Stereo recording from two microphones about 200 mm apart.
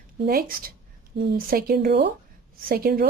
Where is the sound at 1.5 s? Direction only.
45° right (ahead or behind).